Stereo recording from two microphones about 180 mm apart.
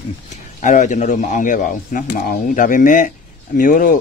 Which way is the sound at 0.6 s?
45° left (ahead or behind).